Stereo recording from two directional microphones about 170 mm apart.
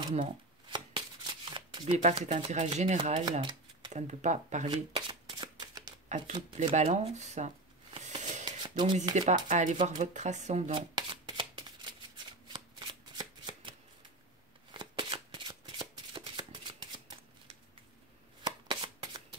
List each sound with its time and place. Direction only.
0.0 s shuffling cards: 30° right (ahead or behind)
2.0 s speech: 40° right (ahead or behind); by 3.9 s 25° right (ahead or behind)
3.9 s speech: 45° right (ahead or behind)
4.6 s shuffling cards: 30° right (ahead or behind)
6.0 s speech: 45° right (ahead or behind)
6.7 s a sound: 45° right (ahead or behind)
8.5 s a sound: 25° right (ahead or behind)
9.1 s speech: 50° right (ahead or behind)
10.7 s shuffling cards: 30° right (ahead or behind)
18.4 s shuffling cards: 25° right (ahead or behind)